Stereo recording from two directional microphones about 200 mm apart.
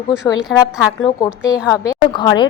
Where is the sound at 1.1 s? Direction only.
20° left (ahead or behind).